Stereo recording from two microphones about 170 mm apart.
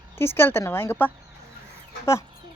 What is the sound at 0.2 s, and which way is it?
Speech, 15° left (ahead or behind).